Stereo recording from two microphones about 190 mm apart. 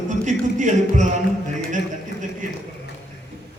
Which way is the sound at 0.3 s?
40° right (ahead or behind).